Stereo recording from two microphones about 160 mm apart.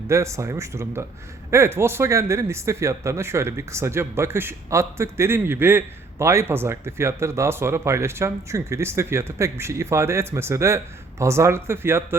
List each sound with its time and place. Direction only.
0.1 s speech: 20° right (ahead or behind)